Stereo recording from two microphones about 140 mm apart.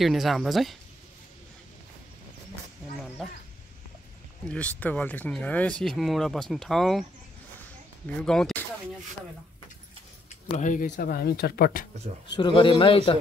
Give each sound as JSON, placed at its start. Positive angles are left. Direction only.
{"t": 0.0, "sound": "speech", "side_deg": 0}
{"t": 4.5, "sound": "speech", "side_deg": 10}
{"t": 8.2, "sound": "speech", "side_deg": 5}
{"t": 10.6, "sound": "speech", "side_deg": 75}
{"t": 12.3, "sound": "speech", "side_deg": 35}